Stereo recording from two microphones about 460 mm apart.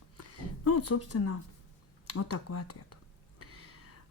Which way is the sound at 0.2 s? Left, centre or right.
Left.